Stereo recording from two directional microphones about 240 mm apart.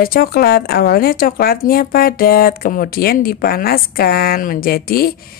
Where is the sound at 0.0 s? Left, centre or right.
Left.